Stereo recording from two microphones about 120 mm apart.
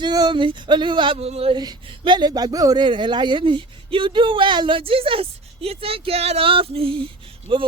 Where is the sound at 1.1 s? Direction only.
60° right (ahead or behind).